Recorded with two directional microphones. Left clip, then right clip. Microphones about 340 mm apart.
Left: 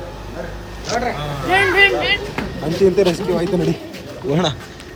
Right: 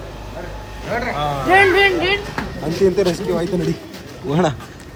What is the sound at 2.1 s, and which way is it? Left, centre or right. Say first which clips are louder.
Speech: left 1 dB; centre.